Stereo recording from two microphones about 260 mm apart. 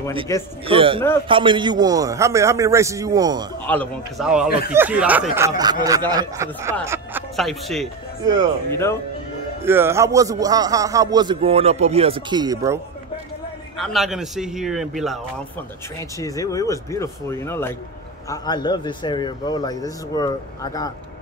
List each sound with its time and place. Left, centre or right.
0.3 s speech: centre
0.7 s a man's voice: centre
3.6 s a man's voice: centre
9.7 s speech: centre
13.7 s a man's voice: centre
16.0 s speech: centre